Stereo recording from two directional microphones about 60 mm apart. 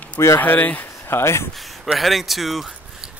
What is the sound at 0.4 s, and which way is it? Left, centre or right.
Speech, left.